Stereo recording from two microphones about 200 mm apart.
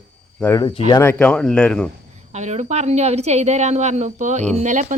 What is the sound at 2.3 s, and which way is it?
A woman's voice, 35° right (ahead or behind).